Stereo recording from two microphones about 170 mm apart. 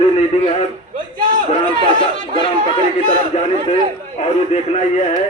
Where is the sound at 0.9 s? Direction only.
55° right (ahead or behind).